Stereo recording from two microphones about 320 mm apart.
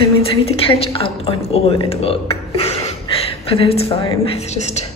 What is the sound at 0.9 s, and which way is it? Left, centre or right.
A woman's voice, centre.